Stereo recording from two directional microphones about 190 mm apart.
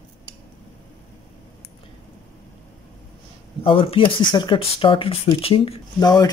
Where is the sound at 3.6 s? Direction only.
30° left (ahead or behind).